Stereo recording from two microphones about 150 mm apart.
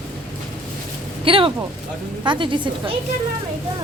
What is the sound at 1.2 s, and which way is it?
A woman's voice, 35° right (ahead or behind).